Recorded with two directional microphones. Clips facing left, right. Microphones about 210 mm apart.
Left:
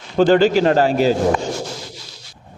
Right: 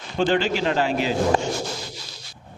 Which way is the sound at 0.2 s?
40° left (ahead or behind).